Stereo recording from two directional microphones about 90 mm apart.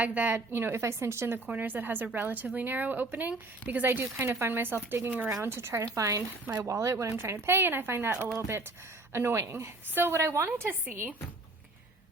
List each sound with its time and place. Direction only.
0.0 s a woman's voice: 20° right (ahead or behind)